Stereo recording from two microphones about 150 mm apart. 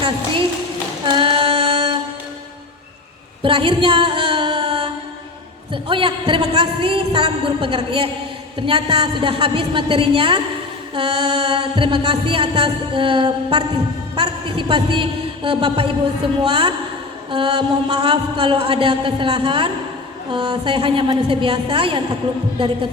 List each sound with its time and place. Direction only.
1.0 s female singing: 30° right (ahead or behind)
3.4 s a sound: 35° right (ahead or behind)
5.7 s music: 35° right (ahead or behind)